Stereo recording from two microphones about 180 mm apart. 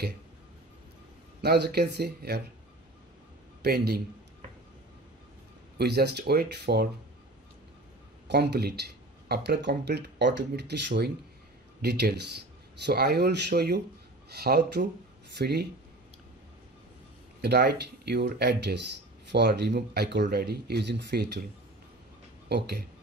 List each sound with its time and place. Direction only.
1.4 s speech: 65° right (ahead or behind)
3.6 s speech: 60° right (ahead or behind)
5.8 s speech: 65° right (ahead or behind)
8.3 s speech: 65° right (ahead or behind)
17.4 s speech: 65° right (ahead or behind)
22.5 s speech: 65° right (ahead or behind)